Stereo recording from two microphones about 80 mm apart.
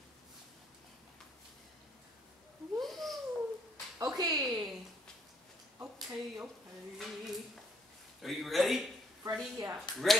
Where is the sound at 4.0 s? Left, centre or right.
Right.